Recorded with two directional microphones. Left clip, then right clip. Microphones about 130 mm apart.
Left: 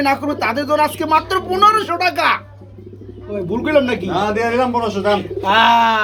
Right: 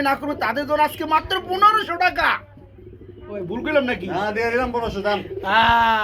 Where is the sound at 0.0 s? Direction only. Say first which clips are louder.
Left 4 dB; 15° right (ahead or behind).